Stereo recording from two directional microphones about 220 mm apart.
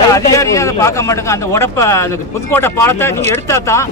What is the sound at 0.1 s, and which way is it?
A man's voice, 15° left (ahead or behind).